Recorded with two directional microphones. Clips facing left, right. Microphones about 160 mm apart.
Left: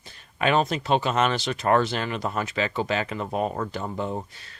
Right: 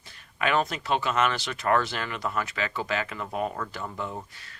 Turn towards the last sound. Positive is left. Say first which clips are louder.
# left 6 dB
turn(degrees=25)  # may be behind; listen again after turning